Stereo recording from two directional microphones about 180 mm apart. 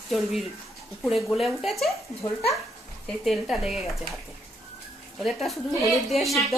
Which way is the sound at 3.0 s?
Centre (ahead or behind).